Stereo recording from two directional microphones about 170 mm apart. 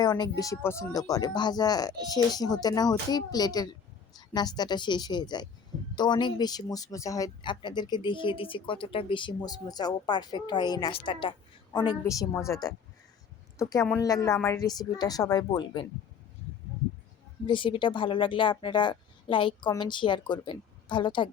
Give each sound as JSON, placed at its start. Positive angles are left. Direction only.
{"t": 0.0, "sound": "speech", "side_deg": 25}
{"t": 17.4, "sound": "speech", "side_deg": 30}